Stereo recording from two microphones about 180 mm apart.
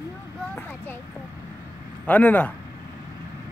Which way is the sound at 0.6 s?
10° left (ahead or behind).